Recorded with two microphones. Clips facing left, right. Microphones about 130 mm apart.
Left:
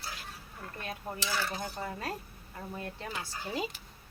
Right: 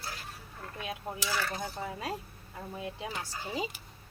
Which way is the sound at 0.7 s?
10° right (ahead or behind).